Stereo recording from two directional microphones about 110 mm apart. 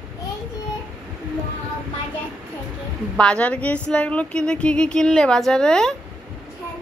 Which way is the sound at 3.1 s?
10° left (ahead or behind).